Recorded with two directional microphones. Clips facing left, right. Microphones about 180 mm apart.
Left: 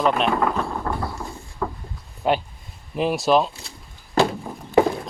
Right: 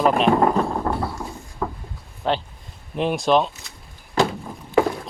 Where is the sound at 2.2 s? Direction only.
10° left (ahead or behind).